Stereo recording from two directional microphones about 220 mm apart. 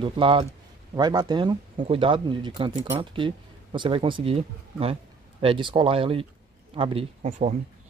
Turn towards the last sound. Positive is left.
turn(degrees=-30)  # may be behind; listen again after turning